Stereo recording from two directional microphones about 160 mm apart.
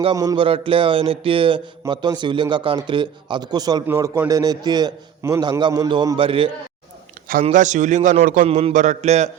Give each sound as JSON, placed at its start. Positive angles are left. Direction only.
{"t": 0.0, "sound": "a man's voice", "side_deg": -25}
{"t": 3.8, "sound": "a man's voice", "side_deg": -15}
{"t": 7.5, "sound": "a man's voice", "side_deg": -50}
{"t": 8.4, "sound": "a man's voice", "side_deg": -40}